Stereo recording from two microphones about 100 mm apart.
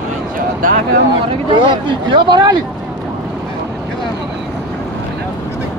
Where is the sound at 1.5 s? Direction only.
50° right (ahead or behind).